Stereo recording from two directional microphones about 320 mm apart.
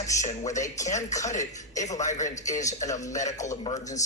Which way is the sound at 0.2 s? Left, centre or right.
Centre.